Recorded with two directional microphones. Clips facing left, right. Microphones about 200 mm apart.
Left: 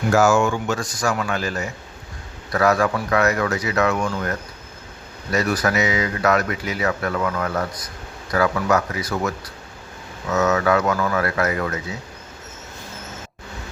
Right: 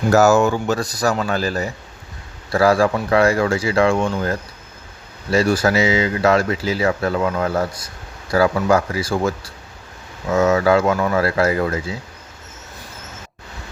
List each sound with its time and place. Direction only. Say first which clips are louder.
0.1 s speech: right 3 dB; 40° right (ahead or behind)